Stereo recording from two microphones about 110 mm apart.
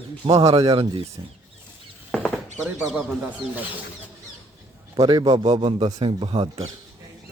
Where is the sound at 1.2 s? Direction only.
35° right (ahead or behind).